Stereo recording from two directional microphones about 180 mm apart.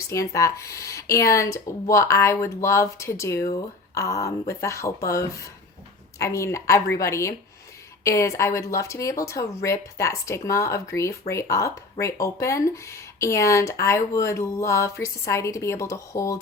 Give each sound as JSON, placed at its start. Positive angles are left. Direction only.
{"t": 0.1, "sound": "speech", "side_deg": 15}
{"t": 6.1, "sound": "speech", "side_deg": 15}